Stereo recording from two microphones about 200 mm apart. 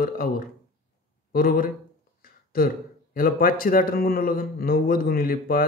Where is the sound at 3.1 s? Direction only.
45° left (ahead or behind).